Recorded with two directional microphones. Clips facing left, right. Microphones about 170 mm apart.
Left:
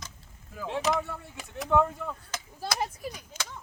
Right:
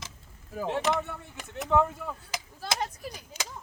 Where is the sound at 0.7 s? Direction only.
Centre (ahead or behind).